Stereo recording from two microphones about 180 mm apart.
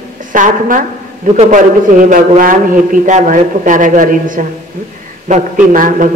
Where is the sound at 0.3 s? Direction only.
45° right (ahead or behind).